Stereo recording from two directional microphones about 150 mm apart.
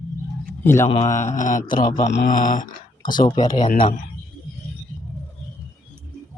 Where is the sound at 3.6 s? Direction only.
60° left (ahead or behind).